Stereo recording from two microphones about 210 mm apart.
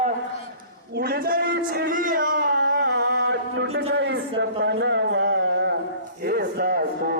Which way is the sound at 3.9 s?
50° right (ahead or behind).